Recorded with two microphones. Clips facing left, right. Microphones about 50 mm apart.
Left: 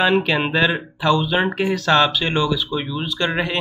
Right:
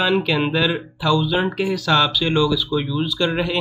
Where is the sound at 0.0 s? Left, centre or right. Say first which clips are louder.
Left 1 dB; left.